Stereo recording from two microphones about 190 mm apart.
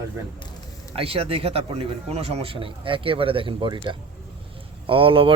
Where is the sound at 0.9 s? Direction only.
30° right (ahead or behind).